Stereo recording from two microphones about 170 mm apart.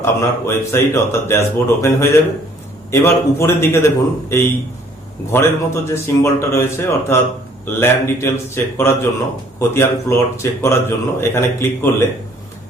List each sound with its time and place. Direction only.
0.0 s a man's voice: 15° left (ahead or behind)